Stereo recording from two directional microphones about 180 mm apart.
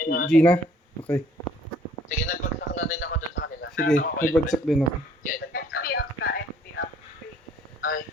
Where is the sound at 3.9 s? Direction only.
45° left (ahead or behind).